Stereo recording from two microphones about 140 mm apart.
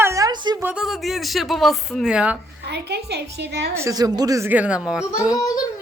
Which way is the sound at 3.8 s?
25° right (ahead or behind).